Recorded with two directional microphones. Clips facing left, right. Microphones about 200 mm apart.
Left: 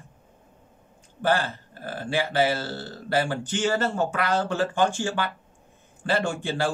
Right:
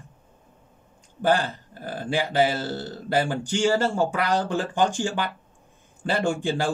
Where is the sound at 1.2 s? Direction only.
15° right (ahead or behind).